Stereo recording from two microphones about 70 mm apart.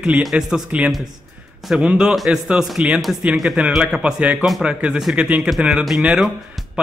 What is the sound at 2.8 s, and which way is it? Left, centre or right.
Speech, centre.